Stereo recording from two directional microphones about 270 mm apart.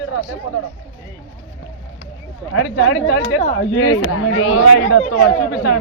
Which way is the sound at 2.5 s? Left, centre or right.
Left.